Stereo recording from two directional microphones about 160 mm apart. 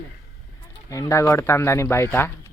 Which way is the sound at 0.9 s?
20° left (ahead or behind).